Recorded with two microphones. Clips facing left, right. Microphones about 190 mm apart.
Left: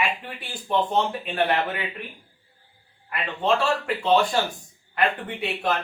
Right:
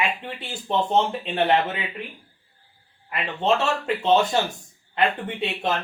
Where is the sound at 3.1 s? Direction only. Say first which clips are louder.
Right 1 dB; 20° right (ahead or behind).